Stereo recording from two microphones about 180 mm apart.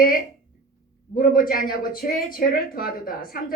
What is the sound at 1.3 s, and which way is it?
Speech, 50° left (ahead or behind).